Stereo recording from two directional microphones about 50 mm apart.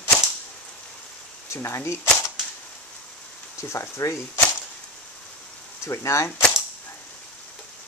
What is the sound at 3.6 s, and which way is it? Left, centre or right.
Speech, left.